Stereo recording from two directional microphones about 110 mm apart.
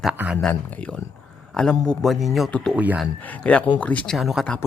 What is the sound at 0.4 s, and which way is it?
Speech, 10° left (ahead or behind).